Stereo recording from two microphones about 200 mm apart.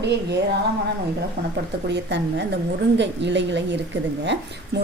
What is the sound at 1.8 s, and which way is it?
Speech, 60° right (ahead or behind).